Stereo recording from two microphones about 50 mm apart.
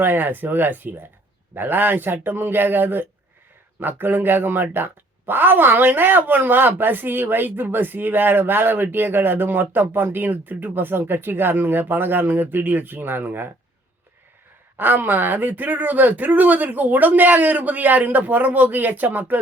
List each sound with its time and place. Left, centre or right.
0.0 s speech: right
14.8 s speech: right